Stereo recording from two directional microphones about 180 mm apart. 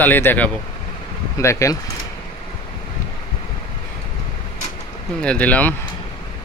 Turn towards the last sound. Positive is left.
turn(degrees=10)  # may be behind; listen again after turning